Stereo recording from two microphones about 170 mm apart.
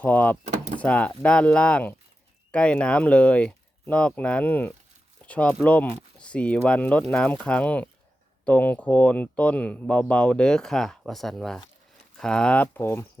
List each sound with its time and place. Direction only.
0.0 s speech: 10° left (ahead or behind)
0.4 s door: 45° right (ahead or behind)
0.8 s speech: 10° left (ahead or behind)